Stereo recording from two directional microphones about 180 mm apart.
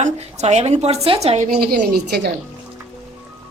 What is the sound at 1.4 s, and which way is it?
Speech, 55° right (ahead or behind).